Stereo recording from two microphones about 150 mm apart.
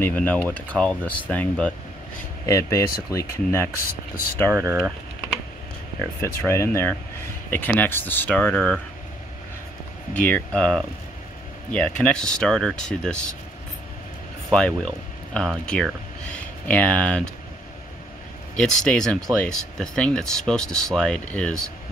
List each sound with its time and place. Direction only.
0.0 s speech: 10° left (ahead or behind)
2.4 s speech: 20° left (ahead or behind)
4.5 s speech: 15° right (ahead or behind)
6.2 s speech: 15° left (ahead or behind)
10.2 s speech: 10° left (ahead or behind)
14.5 s speech: 5° left (ahead or behind)
18.6 s speech: 5° left (ahead or behind)